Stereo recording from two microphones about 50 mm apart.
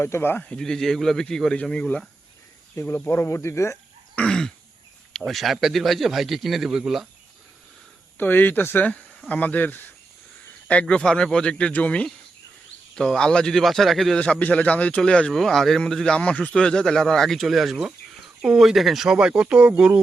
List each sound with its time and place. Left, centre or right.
0.0 s speech: left
0.6 s speech: centre
2.8 s speech: left
3.1 s speech: left
4.3 s throat clearing: centre
5.2 s a man's voice: centre
8.2 s speech: left
8.9 s insect: centre
9.3 s speech: left
10.7 s speech: left
13.0 s speech: centre
14.2 s speech: left
15.3 s a man's voice: centre; by 20.0 s right